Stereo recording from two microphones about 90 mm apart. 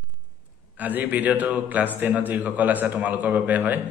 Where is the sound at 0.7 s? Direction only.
20° right (ahead or behind).